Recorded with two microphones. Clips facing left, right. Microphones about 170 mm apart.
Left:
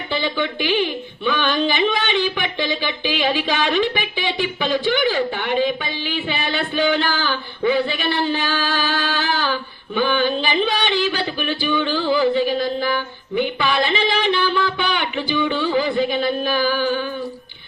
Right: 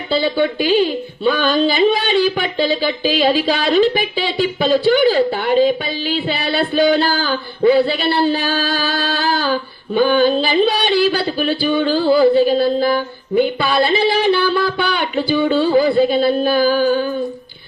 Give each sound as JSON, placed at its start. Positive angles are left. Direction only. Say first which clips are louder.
{"t": 0.1, "sound": "speech", "louder": "right 7 dB", "side_deg": -35}
{"t": 10.7, "sound": "a sound", "louder": "right 5 dB", "side_deg": -35}
{"t": 11.3, "sound": "speech", "louder": "right 5 dB", "side_deg": -40}